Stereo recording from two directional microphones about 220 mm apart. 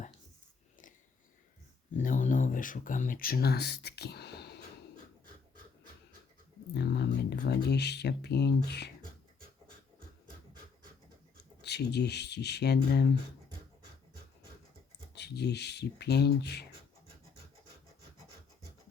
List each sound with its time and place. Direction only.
1.9 s speech: 35° left (ahead or behind)
6.7 s speech: 50° left (ahead or behind)
11.6 s speech: 50° left (ahead or behind)
15.1 s speech: 50° left (ahead or behind)